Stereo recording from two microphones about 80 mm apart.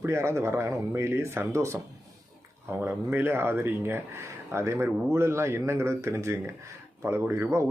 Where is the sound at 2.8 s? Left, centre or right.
Right.